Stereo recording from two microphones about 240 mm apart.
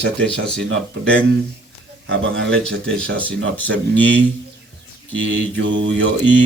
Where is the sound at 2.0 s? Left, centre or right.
Right.